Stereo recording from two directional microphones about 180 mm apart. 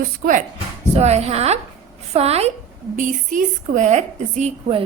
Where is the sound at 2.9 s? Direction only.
45° right (ahead or behind).